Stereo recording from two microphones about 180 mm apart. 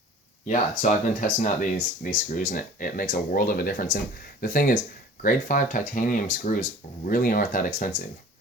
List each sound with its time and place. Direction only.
0.4 s speech: 45° left (ahead or behind)